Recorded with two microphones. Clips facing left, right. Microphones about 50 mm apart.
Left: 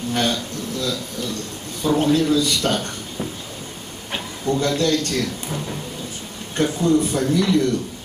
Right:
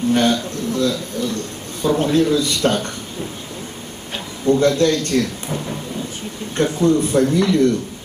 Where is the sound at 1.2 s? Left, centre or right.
Right.